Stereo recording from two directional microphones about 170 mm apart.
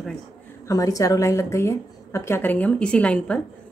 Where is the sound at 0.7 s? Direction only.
20° left (ahead or behind).